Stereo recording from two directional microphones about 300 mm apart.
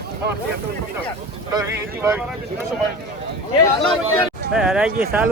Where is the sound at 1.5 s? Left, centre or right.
Centre.